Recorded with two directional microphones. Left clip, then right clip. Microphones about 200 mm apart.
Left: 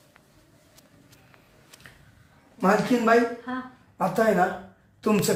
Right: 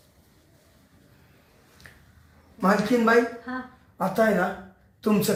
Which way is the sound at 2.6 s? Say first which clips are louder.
Even; 15° left (ahead or behind).